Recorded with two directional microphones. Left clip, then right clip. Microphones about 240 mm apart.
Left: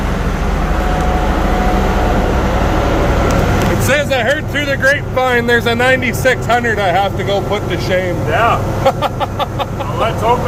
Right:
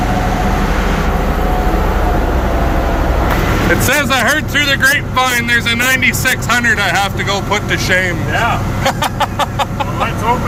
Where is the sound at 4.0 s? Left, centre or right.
Centre.